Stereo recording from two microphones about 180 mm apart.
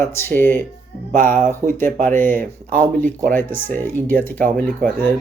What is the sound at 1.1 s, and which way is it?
Speech, 45° right (ahead or behind).